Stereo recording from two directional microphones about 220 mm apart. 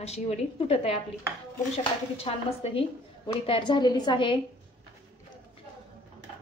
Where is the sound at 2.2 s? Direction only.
25° left (ahead or behind).